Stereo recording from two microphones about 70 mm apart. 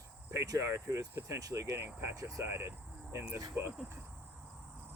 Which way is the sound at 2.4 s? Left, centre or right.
Right.